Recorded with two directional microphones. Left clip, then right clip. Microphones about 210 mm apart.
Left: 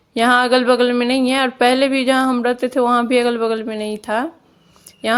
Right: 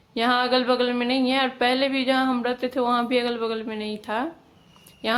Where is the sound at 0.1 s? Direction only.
35° left (ahead or behind).